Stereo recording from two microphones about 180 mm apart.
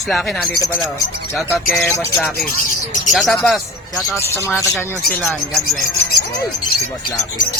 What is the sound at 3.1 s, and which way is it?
Mantra, centre (ahead or behind).